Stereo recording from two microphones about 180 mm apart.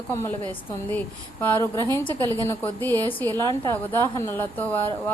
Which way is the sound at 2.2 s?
20° right (ahead or behind).